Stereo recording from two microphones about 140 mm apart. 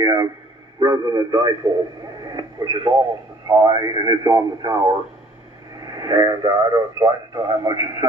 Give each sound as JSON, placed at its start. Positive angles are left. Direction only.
{"t": 0.0, "sound": "a sound", "side_deg": -25}
{"t": 0.7, "sound": "a man's voice", "side_deg": -25}
{"t": 2.2, "sound": "radio", "side_deg": -25}
{"t": 3.4, "sound": "speech", "side_deg": -25}